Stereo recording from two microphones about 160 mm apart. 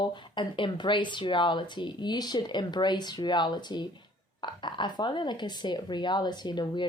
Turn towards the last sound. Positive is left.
turn(degrees=25)  # may be behind; listen again after turning